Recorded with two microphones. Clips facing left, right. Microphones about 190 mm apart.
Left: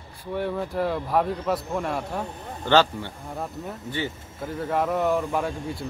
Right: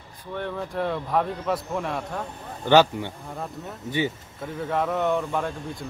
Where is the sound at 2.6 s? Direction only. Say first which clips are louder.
Right 2 dB; 15° right (ahead or behind).